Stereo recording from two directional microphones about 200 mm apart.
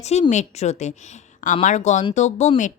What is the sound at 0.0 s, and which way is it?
Speech, 35° left (ahead or behind).